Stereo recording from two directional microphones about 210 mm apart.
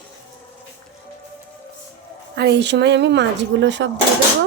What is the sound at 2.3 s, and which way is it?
Speech, 55° right (ahead or behind).